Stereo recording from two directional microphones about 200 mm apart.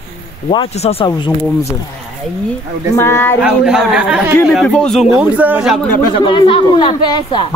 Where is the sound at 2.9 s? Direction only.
10° left (ahead or behind).